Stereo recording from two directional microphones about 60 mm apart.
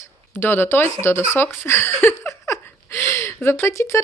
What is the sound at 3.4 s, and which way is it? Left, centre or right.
Speech, left.